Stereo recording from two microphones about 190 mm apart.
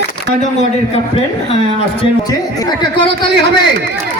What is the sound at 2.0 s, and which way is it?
Speech, 25° left (ahead or behind).